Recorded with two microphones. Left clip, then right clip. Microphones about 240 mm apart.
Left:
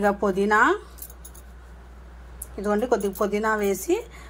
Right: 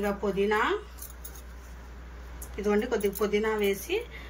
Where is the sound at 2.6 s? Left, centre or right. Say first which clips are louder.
Left 4 dB; centre.